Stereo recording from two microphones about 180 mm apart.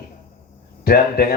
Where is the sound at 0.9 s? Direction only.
55° left (ahead or behind).